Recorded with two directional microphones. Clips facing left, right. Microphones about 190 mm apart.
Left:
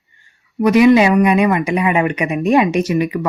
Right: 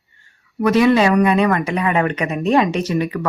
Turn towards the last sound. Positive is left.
turn(degrees=10)  # may be behind; listen again after turning